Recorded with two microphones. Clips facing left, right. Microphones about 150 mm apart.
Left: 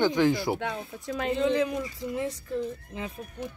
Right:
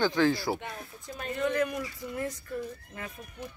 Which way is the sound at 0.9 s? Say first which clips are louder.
Left 9 dB; 90° left.